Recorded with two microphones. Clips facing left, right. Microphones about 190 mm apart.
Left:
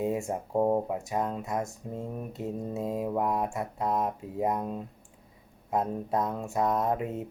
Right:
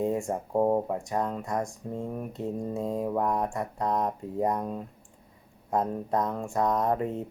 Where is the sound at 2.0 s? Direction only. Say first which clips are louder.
Right 2 dB; 5° left (ahead or behind).